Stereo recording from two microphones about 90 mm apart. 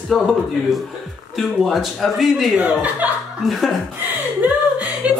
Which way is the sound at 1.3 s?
Centre (ahead or behind).